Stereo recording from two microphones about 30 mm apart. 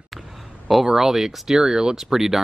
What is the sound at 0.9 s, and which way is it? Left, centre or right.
Speech, centre.